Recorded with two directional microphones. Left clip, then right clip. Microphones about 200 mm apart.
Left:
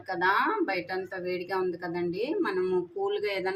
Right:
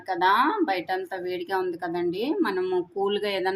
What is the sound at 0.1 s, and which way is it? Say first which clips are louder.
A woman's voice: right 4 dB; 35° right (ahead or behind).